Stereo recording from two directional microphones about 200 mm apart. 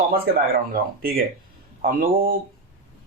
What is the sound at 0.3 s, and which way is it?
Speech, 50° right (ahead or behind).